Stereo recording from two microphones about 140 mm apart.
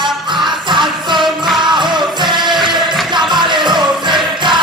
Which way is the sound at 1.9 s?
30° right (ahead or behind).